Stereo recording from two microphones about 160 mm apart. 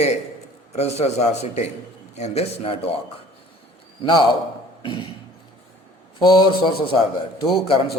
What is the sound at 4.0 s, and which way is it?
Speech, 30° left (ahead or behind).